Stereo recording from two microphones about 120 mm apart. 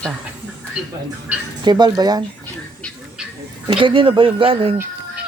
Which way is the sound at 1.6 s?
35° right (ahead or behind).